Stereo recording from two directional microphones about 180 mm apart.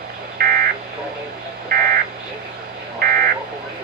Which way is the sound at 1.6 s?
55° right (ahead or behind).